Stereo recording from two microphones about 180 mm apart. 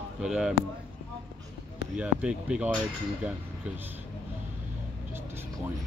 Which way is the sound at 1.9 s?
5° right (ahead or behind).